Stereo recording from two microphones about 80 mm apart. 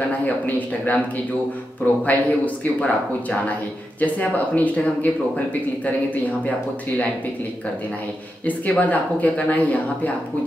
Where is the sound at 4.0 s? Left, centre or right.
Centre.